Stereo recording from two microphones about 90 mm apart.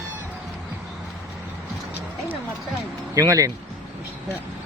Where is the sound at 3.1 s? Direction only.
40° right (ahead or behind).